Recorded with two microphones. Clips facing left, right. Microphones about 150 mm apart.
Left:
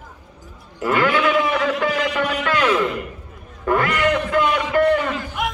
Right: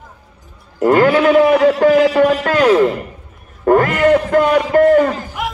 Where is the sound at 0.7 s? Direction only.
40° right (ahead or behind).